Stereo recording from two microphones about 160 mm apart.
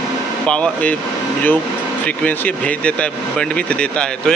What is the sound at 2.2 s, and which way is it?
Speech, 10° left (ahead or behind).